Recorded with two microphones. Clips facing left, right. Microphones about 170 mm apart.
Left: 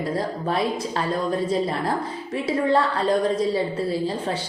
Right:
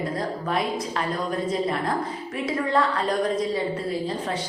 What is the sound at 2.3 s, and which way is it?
A woman's voice, 30° left (ahead or behind).